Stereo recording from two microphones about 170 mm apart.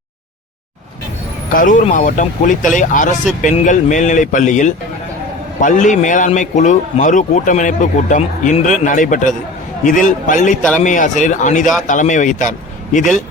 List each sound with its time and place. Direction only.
1.5 s speech: 50° left (ahead or behind)